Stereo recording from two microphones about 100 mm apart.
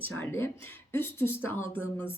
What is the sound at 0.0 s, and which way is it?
Speech, 20° left (ahead or behind).